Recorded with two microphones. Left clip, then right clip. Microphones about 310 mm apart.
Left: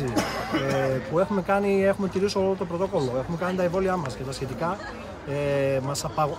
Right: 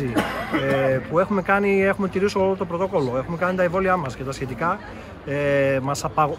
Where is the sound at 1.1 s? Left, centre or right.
Centre.